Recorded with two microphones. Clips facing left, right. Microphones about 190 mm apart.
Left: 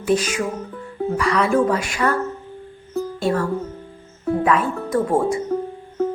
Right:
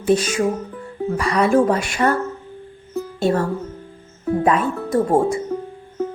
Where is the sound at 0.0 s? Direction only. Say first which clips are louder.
Right 3 dB; 25° right (ahead or behind).